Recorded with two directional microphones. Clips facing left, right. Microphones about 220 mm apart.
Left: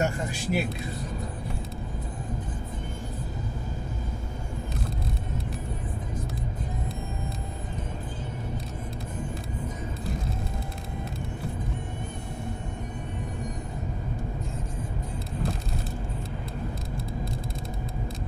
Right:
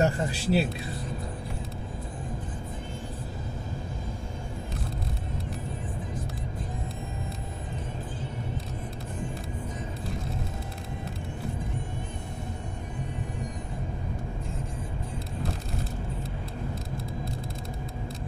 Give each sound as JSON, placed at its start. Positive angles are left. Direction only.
{"t": 0.0, "sound": "a man's voice", "side_deg": -35}